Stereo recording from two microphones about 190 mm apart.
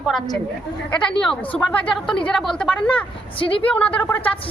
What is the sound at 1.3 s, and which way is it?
A woman's voice, 5° left (ahead or behind).